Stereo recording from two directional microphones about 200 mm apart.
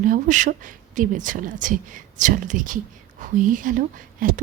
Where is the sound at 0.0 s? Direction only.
40° right (ahead or behind).